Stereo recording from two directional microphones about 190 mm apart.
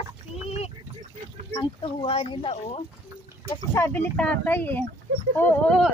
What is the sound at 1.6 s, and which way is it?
Speech, 30° left (ahead or behind).